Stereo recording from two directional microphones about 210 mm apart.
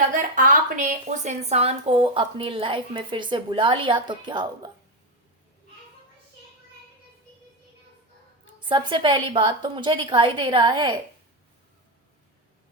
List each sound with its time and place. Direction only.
0.1 s a sound: 40° right (ahead or behind)
2.1 s a woman's voice: 25° right (ahead or behind)
8.6 s a woman's voice: 25° right (ahead or behind)